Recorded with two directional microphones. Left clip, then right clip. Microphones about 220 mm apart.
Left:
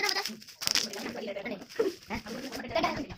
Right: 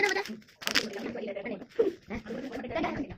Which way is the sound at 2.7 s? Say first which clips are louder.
Left 3 dB; centre (ahead or behind).